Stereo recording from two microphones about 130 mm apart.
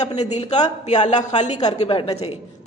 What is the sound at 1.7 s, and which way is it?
Speech, 50° left (ahead or behind).